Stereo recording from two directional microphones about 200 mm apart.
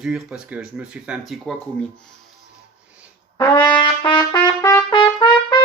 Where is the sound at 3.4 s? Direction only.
20° left (ahead or behind).